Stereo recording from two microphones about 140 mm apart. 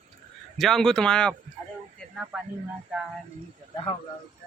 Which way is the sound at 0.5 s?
5° left (ahead or behind).